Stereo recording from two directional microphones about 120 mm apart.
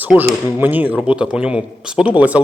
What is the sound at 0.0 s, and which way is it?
Speech, 15° right (ahead or behind).